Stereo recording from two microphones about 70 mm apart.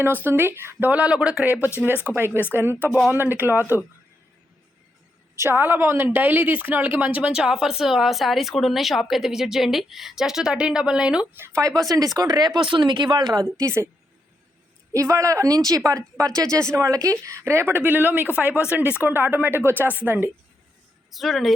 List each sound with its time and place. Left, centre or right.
0.0 s speech: right
0.9 s speech: centre
2.1 s speech: right
2.7 s speech: left
3.1 s speech: right
5.4 s speech: right; by 11.3 s centre
11.3 s speech: right
11.8 s speech: right
12.8 s speech: right
13.4 s speech: right
14.9 s speech: right
17.8 s speech: right
21.1 s speech: centre